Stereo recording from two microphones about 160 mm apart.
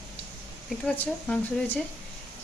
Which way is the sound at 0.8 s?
10° left (ahead or behind).